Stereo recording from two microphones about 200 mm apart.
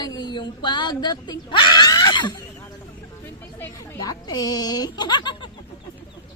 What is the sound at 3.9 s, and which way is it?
Speech, 20° left (ahead or behind).